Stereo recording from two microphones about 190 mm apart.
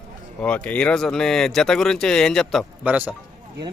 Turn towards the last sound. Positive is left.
turn(degrees=-10)  # may be behind; listen again after turning